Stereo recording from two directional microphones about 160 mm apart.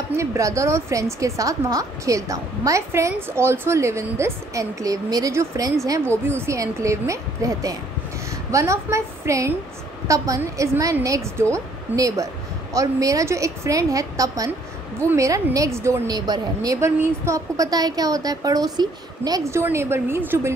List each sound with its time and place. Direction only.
0.1 s speech: 15° right (ahead or behind)